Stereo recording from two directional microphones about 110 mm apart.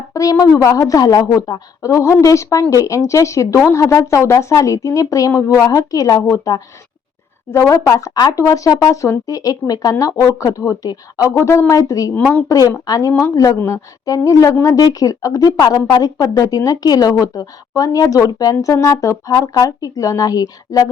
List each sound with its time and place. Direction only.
0.1 s speech: 30° left (ahead or behind)